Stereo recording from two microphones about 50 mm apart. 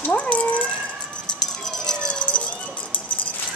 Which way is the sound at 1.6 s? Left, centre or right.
Centre.